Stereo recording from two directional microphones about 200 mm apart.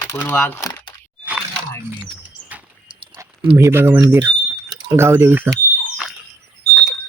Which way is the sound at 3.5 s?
10° right (ahead or behind).